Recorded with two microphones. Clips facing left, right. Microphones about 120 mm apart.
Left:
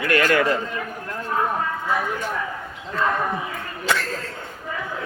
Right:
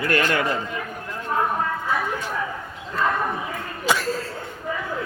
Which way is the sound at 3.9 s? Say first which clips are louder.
Right 2 dB; 10° right (ahead or behind).